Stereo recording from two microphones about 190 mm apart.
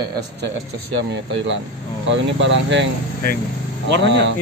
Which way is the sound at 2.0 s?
70° right (ahead or behind).